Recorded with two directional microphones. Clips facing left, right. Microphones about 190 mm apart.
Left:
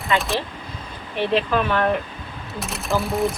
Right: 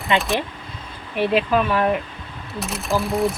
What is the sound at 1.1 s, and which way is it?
Speech, 10° right (ahead or behind).